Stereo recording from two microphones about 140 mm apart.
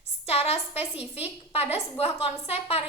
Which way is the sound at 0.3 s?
45° left (ahead or behind).